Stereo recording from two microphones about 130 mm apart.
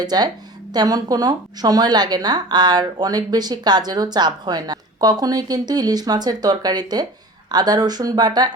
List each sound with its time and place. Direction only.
0.0 s a woman's voice: 30° right (ahead or behind)